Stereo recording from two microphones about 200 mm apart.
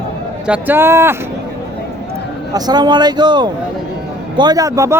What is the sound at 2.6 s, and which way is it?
A man's voice, 20° right (ahead or behind).